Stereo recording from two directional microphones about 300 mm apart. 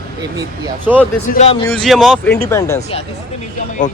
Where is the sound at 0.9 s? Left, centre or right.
Centre.